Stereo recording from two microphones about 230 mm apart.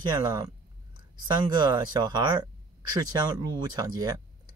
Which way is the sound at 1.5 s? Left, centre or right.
Centre.